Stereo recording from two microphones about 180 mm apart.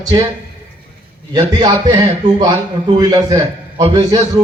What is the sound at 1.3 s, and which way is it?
Speech, 25° right (ahead or behind).